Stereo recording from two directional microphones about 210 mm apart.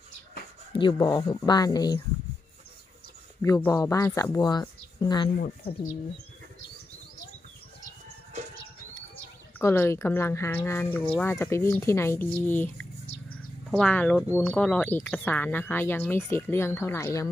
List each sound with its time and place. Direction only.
0.7 s speech: 25° left (ahead or behind)
3.4 s speech: 15° left (ahead or behind)
9.6 s speech: 10° left (ahead or behind)